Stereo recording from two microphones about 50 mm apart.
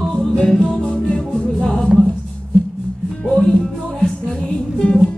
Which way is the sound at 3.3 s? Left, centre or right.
Centre.